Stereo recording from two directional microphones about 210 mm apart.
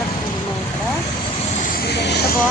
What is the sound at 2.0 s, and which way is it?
Music, 55° left (ahead or behind).